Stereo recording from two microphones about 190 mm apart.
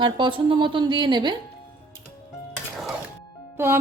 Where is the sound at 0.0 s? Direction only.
25° right (ahead or behind).